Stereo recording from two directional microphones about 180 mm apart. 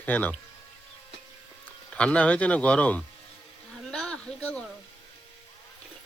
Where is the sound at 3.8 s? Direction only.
5° left (ahead or behind).